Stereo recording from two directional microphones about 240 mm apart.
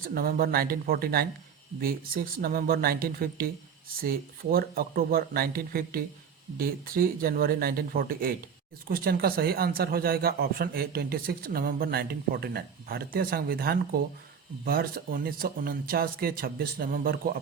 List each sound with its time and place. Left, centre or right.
0.0 s a man's voice: right
4.5 s a man's voice: right